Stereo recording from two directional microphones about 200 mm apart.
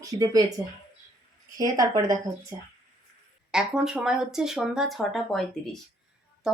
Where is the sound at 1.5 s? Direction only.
20° right (ahead or behind).